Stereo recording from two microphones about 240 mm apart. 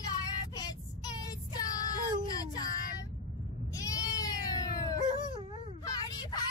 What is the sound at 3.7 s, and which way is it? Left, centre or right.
Goat, centre.